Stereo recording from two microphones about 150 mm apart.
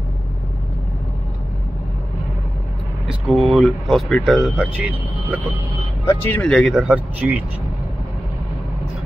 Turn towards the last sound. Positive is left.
turn(degrees=-10)  # may be behind; listen again after turning